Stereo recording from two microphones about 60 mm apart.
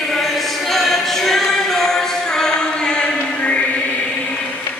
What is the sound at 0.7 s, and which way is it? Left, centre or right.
Music, centre.